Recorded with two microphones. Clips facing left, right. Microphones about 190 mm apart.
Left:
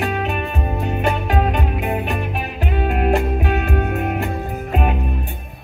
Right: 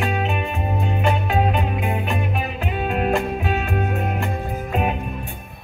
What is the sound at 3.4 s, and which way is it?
Music, 65° left (ahead or behind).